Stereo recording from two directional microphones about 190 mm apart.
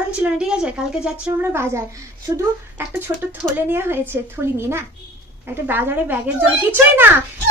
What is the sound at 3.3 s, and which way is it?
A child's voice, 10° right (ahead or behind).